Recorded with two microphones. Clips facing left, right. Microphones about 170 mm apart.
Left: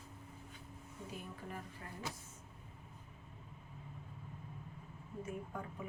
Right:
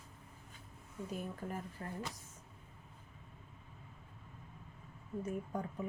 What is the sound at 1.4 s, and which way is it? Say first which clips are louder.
Speech: right 5 dB; 45° right (ahead or behind).